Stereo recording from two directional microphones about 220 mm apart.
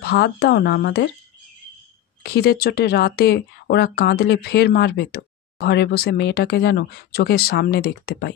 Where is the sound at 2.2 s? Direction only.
45° left (ahead or behind).